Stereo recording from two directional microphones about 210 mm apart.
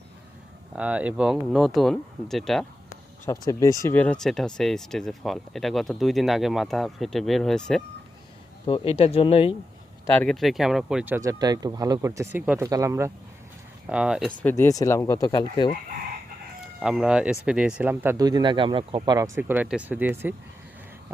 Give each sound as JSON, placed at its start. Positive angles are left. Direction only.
{"t": 0.8, "sound": "speech", "side_deg": -5}
{"t": 3.2, "sound": "speech", "side_deg": 15}
{"t": 8.6, "sound": "speech", "side_deg": 25}
{"t": 10.1, "sound": "speech", "side_deg": 5}
{"t": 14.4, "sound": "speech", "side_deg": 10}
{"t": 16.8, "sound": "speech", "side_deg": -5}
{"t": 19.4, "sound": "speech", "side_deg": -10}